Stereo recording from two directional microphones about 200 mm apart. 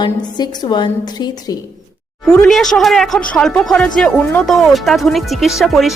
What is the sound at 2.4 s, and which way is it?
Speech, centre (ahead or behind).